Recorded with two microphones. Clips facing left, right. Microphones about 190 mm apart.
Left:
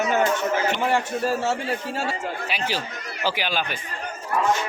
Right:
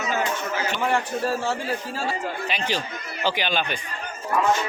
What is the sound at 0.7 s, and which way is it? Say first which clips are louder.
Speech: left 1 dB; 25° left (ahead or behind).